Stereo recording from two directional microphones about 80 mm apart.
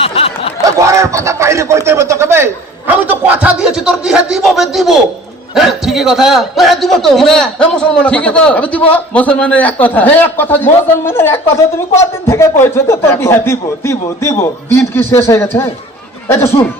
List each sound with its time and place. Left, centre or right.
0.8 s speech: right; by 3.7 s centre
3.7 s a man's voice: centre; by 15.7 s left
16.6 s speech: left